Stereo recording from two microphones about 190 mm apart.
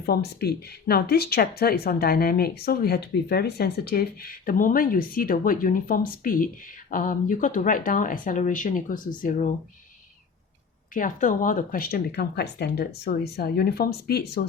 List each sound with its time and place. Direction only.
0.0 s speech: 55° left (ahead or behind)
10.9 s speech: 45° left (ahead or behind)